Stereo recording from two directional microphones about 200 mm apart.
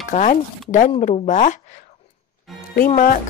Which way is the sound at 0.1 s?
40° left (ahead or behind).